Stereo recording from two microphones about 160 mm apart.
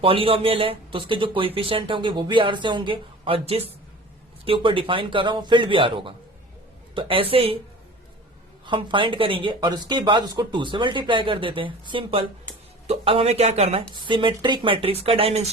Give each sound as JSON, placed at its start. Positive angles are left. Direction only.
{"t": 0.0, "sound": "speech", "side_deg": -35}
{"t": 8.6, "sound": "speech", "side_deg": -30}